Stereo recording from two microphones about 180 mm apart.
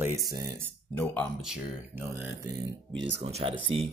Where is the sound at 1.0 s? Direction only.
10° left (ahead or behind).